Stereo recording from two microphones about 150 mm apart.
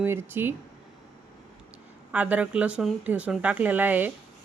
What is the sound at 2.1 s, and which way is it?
Speech, 10° right (ahead or behind).